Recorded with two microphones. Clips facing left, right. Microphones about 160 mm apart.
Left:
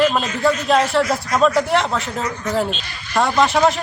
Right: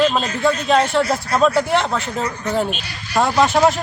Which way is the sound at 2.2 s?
30° right (ahead or behind).